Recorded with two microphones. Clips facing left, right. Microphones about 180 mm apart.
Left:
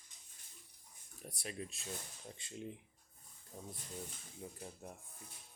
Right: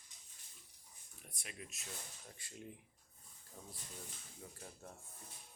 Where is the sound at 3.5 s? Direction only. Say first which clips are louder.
Left 5 dB; 15° left (ahead or behind).